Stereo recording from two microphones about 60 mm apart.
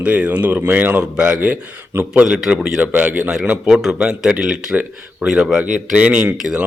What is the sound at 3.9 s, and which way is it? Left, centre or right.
Speech, centre.